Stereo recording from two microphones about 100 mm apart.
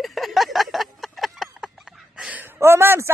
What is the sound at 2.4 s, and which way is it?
Speech, 25° right (ahead or behind).